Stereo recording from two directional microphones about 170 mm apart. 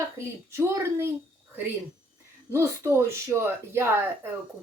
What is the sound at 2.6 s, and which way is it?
Speech, 15° right (ahead or behind).